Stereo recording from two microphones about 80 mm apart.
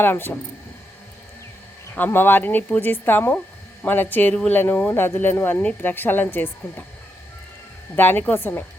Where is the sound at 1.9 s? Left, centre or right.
Left.